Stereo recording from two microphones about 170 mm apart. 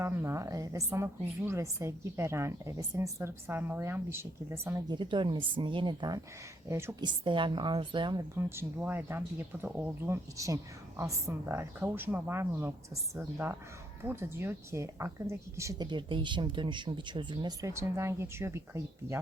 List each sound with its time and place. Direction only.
0.0 s a woman's voice: 15° right (ahead or behind)
4.9 s a woman's voice: 30° right (ahead or behind)
7.0 s speech: 30° right (ahead or behind)
8.4 s a woman's voice: 15° right (ahead or behind)